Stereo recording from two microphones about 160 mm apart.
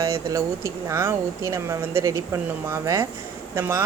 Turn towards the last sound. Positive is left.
turn(degrees=-15)  # may be behind; listen again after turning